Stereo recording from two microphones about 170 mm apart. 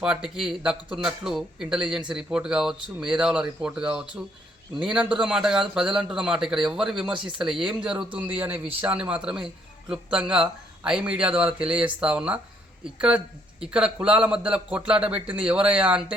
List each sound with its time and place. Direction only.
0.0 s speech: 5° right (ahead or behind)
7.1 s speech: 30° right (ahead or behind)
7.4 s speech: 5° right (ahead or behind)